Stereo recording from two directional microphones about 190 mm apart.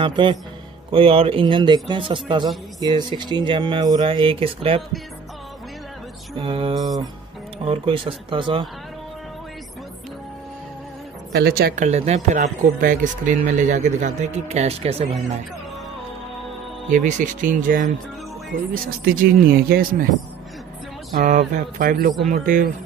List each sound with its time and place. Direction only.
0.0 s speech: 25° right (ahead or behind)
6.4 s speech: 30° right (ahead or behind)
11.3 s speech: 55° right (ahead or behind); by 15.0 s 30° right (ahead or behind)
16.9 s speech: 40° right (ahead or behind)
21.1 s speech: 45° right (ahead or behind)